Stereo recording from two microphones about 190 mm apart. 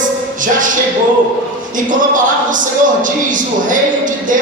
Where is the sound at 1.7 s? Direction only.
45° right (ahead or behind).